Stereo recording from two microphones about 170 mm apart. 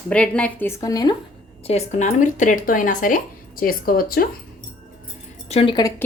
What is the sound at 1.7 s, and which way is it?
Speech, 40° left (ahead or behind).